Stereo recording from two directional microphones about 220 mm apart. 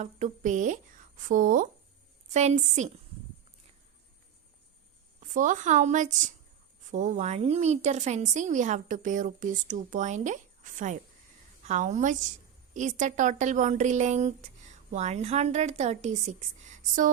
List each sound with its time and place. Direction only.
0.0 s a woman's voice: 35° right (ahead or behind)
5.3 s a woman's voice: 35° right (ahead or behind)